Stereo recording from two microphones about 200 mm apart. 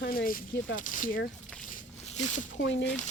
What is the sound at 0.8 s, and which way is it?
Speech, 40° left (ahead or behind).